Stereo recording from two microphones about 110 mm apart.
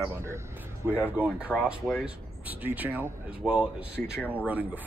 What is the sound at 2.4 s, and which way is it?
Speech, 15° right (ahead or behind).